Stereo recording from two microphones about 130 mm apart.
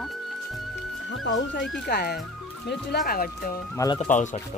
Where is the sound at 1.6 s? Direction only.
5° left (ahead or behind).